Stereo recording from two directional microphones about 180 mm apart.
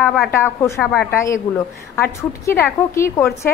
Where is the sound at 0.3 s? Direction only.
15° left (ahead or behind).